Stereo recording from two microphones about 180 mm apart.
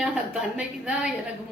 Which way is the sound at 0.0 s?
5° right (ahead or behind).